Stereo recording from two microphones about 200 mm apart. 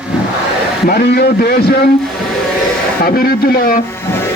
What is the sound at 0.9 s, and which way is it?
Speech, 50° left (ahead or behind).